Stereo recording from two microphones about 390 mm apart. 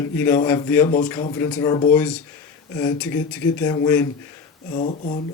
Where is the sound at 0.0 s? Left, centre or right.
Centre.